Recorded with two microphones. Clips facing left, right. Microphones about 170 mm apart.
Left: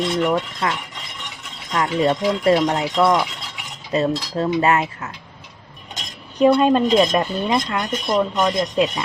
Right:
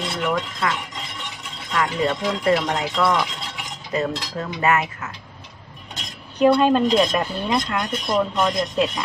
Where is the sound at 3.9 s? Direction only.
25° left (ahead or behind).